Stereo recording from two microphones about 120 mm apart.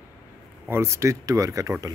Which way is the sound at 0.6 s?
20° right (ahead or behind).